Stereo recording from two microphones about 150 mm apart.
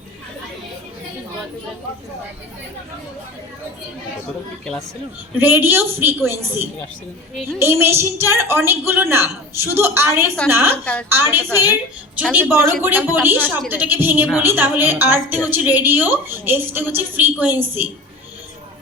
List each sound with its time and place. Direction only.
5.4 s a woman's voice: 15° right (ahead or behind)